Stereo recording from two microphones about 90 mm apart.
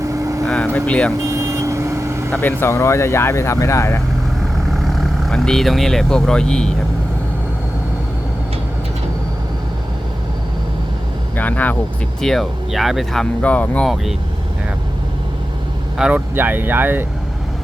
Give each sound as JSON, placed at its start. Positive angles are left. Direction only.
{"t": 0.0, "sound": "vehicle", "side_deg": -40}
{"t": 0.4, "sound": "vehicle", "side_deg": 10}
{"t": 0.7, "sound": "speech", "side_deg": 15}
{"t": 1.2, "sound": "vehicle", "side_deg": -35}
{"t": 2.3, "sound": "speech", "side_deg": 25}
{"t": 4.8, "sound": "speech", "side_deg": 0}
{"t": 11.3, "sound": "speech", "side_deg": 20}
{"t": 12.2, "sound": "speech", "side_deg": 5}
{"t": 13.4, "sound": "speech", "side_deg": 15}
{"t": 13.8, "sound": "speech", "side_deg": 0}
{"t": 16.0, "sound": "speech", "side_deg": -10}
{"t": 16.3, "sound": "speech", "side_deg": -20}